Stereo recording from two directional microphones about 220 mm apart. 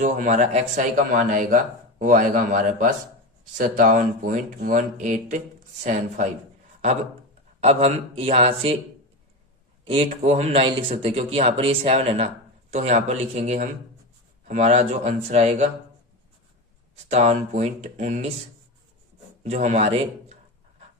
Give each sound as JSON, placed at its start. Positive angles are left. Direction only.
{"t": 0.0, "sound": "speech", "side_deg": -35}
{"t": 7.6, "sound": "speech", "side_deg": -30}
{"t": 9.8, "sound": "speech", "side_deg": -25}
{"t": 17.1, "sound": "speech", "side_deg": -30}
{"t": 19.4, "sound": "speech", "side_deg": -30}